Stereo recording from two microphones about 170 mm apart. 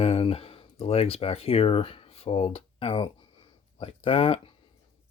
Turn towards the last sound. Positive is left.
turn(degrees=35)  # may be behind; listen again after turning